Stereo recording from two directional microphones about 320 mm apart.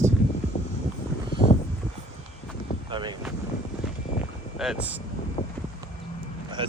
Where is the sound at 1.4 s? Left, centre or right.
Left.